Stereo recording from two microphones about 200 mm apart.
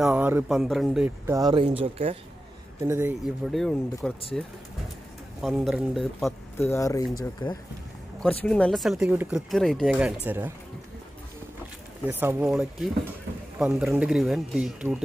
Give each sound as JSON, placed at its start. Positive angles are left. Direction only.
{"t": 0.0, "sound": "speech", "side_deg": -5}
{"t": 2.8, "sound": "speech", "side_deg": -10}
{"t": 3.5, "sound": "speech", "side_deg": 0}
{"t": 6.6, "sound": "speech", "side_deg": 15}
{"t": 8.2, "sound": "speech", "side_deg": 5}
{"t": 12.1, "sound": "speech", "side_deg": -10}